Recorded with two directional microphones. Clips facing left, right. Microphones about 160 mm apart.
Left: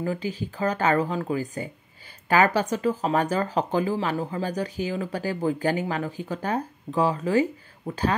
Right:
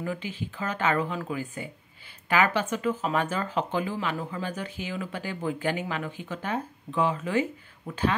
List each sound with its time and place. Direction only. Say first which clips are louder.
0.0 s speech: left 4 dB; 35° left (ahead or behind)